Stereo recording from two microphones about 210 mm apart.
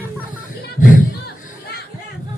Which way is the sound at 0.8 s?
40° left (ahead or behind).